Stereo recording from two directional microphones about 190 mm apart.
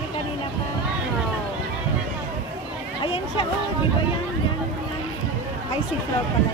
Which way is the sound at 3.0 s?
25° left (ahead or behind).